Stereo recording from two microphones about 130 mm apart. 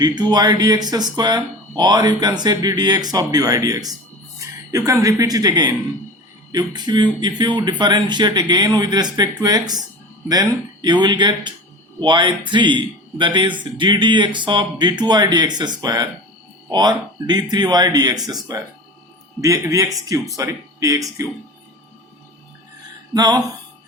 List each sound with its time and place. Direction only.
0.0 s speech: 30° right (ahead or behind)
19.4 s speech: 25° right (ahead or behind)
23.1 s speech: 30° right (ahead or behind)